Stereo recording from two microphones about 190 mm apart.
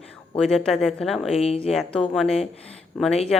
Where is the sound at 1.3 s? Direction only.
30° left (ahead or behind).